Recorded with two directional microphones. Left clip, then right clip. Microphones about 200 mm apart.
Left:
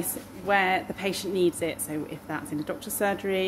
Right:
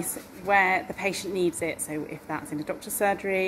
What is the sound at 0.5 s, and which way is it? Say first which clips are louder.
A woman's voice: right 2 dB; 15° left (ahead or behind).